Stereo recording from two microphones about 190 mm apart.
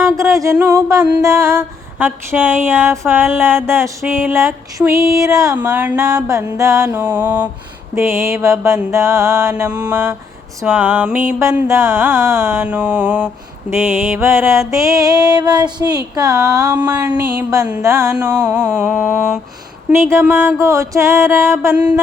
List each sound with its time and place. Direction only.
0.0 s a sound: 15° right (ahead or behind)
0.5 s female singing: 15° right (ahead or behind)
19.9 s female singing: 15° right (ahead or behind)